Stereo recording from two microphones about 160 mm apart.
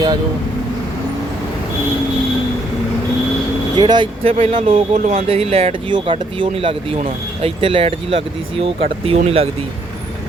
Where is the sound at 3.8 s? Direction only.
30° right (ahead or behind).